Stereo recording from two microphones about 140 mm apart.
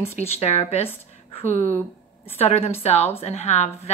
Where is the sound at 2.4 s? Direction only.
50° left (ahead or behind).